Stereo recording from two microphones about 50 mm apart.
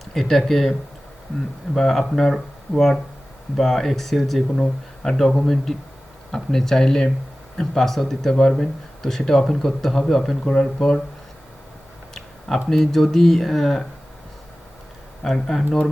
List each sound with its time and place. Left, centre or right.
0.0 s speech: centre
10.4 s speech: centre
12.6 s speech: centre
15.2 s speech: centre